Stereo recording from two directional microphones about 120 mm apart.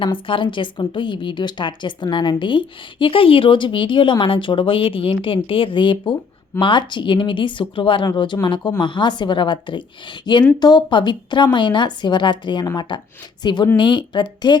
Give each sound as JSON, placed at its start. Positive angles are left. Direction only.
{"t": 0.0, "sound": "a woman's voice", "side_deg": 45}